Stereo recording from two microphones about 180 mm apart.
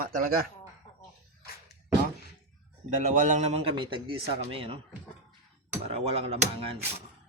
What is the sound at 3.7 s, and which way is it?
Speech, 25° right (ahead or behind).